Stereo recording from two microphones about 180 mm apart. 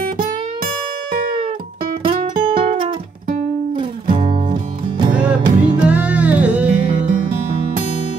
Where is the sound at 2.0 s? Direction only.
30° right (ahead or behind).